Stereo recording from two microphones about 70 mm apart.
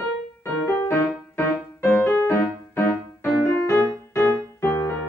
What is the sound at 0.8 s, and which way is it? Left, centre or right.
Music, left.